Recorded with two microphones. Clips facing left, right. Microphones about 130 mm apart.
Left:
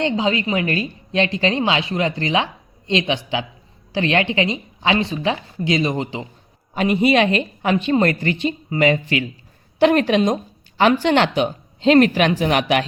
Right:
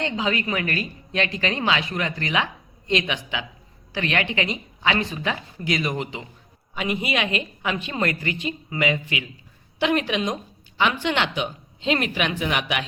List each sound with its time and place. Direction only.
0.0 s a woman's voice: 25° left (ahead or behind)